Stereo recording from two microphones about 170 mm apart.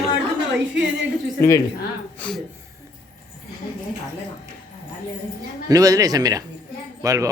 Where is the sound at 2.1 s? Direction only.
5° left (ahead or behind).